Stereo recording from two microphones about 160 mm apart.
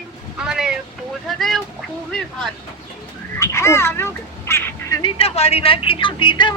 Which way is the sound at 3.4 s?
15° left (ahead or behind).